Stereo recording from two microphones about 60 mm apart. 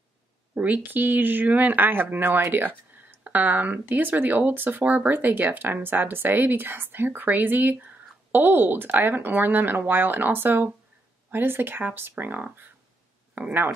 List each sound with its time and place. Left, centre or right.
0.6 s speech: right